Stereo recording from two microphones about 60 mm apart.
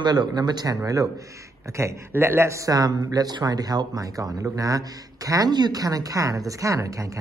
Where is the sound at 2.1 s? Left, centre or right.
Right.